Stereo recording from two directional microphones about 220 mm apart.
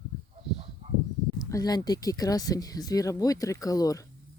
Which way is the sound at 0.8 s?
30° right (ahead or behind).